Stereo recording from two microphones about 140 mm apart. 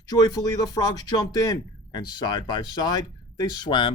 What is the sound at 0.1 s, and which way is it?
Speech, 25° left (ahead or behind).